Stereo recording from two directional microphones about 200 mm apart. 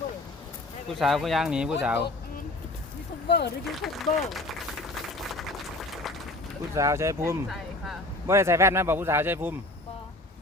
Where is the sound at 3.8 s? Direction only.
Centre (ahead or behind).